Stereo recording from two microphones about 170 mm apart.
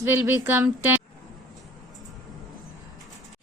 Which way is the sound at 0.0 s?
10° right (ahead or behind).